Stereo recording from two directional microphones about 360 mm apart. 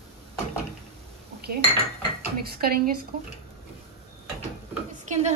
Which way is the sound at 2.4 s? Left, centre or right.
Right.